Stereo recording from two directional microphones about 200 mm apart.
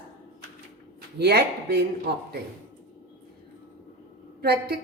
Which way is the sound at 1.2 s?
55° right (ahead or behind).